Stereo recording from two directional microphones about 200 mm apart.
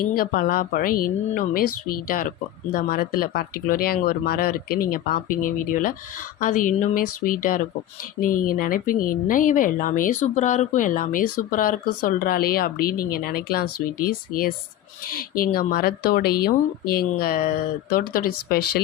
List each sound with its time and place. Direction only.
0.0 s speech: 45° left (ahead or behind)